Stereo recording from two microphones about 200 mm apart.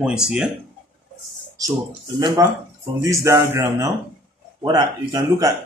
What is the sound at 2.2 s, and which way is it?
Speech, 20° right (ahead or behind).